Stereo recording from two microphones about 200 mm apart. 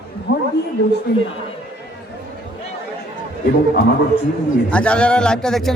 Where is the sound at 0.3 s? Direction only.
50° left (ahead or behind).